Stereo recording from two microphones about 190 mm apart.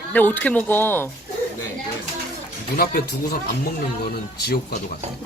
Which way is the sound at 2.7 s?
50° left (ahead or behind).